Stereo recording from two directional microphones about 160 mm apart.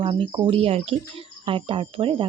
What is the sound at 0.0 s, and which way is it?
Speech, 35° right (ahead or behind).